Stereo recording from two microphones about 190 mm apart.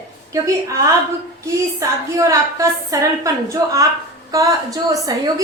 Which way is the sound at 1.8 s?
15° right (ahead or behind).